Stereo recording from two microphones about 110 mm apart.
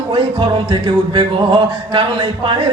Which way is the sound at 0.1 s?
50° right (ahead or behind).